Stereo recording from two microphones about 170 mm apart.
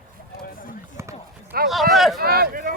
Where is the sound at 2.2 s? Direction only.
60° right (ahead or behind).